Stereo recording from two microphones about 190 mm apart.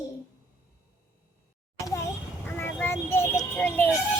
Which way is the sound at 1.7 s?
15° left (ahead or behind).